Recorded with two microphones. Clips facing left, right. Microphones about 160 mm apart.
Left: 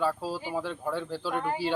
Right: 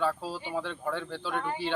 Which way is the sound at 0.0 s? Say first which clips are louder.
Left 1 dB; 5° left (ahead or behind).